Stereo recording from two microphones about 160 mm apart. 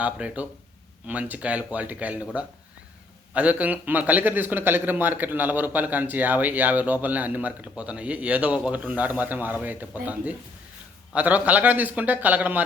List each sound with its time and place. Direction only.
0.0 s a man's voice: 10° right (ahead or behind)
3.3 s a man's voice: 10° right (ahead or behind)